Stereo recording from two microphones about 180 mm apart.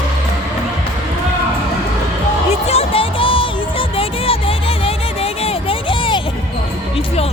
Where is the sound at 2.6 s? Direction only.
30° left (ahead or behind).